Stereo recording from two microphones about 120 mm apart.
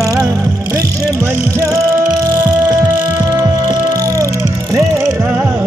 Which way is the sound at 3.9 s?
30° right (ahead or behind).